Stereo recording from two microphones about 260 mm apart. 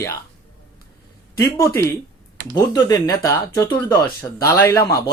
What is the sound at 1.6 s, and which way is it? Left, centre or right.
Speech, centre.